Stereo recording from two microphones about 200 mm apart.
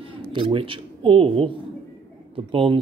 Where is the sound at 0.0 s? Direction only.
25° right (ahead or behind).